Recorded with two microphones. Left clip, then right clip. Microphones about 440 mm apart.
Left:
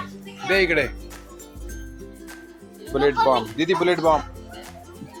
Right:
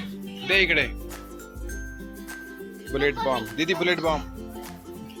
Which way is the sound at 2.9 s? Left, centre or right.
Right.